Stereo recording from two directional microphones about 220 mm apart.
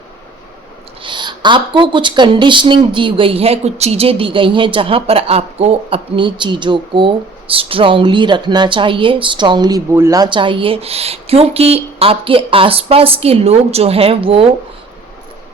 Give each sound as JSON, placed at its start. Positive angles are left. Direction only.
{"t": 1.0, "sound": "speech", "side_deg": -20}